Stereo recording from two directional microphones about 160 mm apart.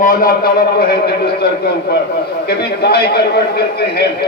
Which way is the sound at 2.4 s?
80° left.